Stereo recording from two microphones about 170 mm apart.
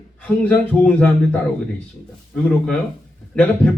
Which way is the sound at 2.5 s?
5° left (ahead or behind).